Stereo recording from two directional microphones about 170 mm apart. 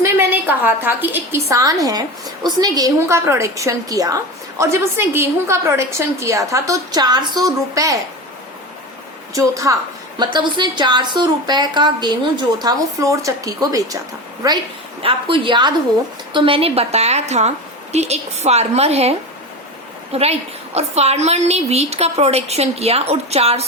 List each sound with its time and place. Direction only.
0.0 s a woman's voice: 15° right (ahead or behind)
9.3 s a woman's voice: 20° right (ahead or behind)
15.0 s a woman's voice: 30° right (ahead or behind)
20.1 s a woman's voice: 35° right (ahead or behind)